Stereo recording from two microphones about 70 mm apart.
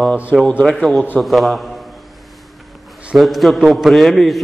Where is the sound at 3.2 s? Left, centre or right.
Centre.